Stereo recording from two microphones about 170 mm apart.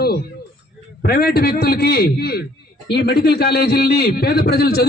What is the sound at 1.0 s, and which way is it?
A man's voice, 65° left (ahead or behind).